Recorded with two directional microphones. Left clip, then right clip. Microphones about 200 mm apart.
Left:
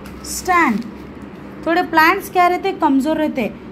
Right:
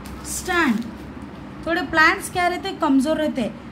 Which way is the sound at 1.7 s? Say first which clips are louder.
Left 4 dB; 5° left (ahead or behind).